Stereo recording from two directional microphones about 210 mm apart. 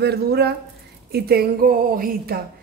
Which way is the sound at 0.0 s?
50° right (ahead or behind).